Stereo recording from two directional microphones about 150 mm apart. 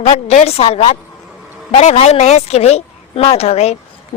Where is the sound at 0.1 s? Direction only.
55° left (ahead or behind).